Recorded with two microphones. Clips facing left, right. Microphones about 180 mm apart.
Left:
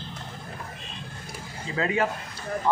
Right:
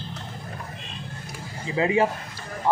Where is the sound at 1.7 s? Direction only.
20° right (ahead or behind).